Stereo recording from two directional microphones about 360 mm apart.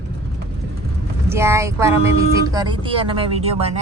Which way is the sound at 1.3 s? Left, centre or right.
Centre.